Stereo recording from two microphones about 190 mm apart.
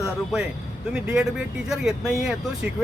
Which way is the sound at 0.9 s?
5° right (ahead or behind).